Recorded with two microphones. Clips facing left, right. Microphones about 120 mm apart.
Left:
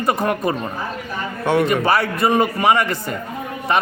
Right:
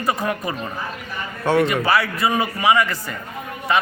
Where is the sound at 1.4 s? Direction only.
20° left (ahead or behind).